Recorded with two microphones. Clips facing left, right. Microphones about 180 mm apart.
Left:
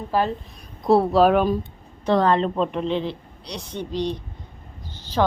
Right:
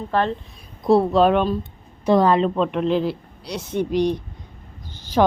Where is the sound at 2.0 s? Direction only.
10° right (ahead or behind).